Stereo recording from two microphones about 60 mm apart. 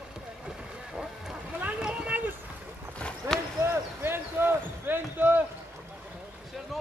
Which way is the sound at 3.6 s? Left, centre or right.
Right.